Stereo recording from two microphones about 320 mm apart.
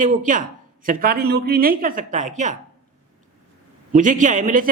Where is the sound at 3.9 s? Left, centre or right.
Right.